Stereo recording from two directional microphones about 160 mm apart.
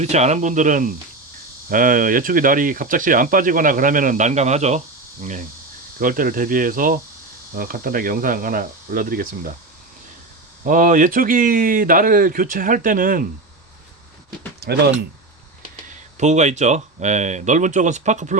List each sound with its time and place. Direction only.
0.0 s speech: 45° right (ahead or behind); by 9.5 s 60° right (ahead or behind)
10.7 s speech: 55° right (ahead or behind)
14.6 s speech: 90° right
15.9 s speech: 45° right (ahead or behind)